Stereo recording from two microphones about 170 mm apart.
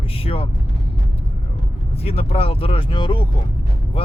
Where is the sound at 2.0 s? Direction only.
35° left (ahead or behind).